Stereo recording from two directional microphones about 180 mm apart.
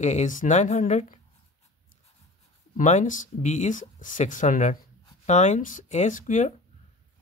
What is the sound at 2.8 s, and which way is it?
Speech, 45° left (ahead or behind).